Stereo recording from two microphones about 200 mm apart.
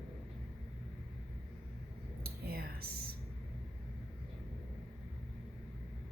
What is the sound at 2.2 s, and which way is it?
Whispering, 50° right (ahead or behind).